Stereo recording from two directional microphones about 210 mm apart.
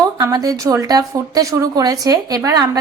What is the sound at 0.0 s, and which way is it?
Speech, 15° right (ahead or behind).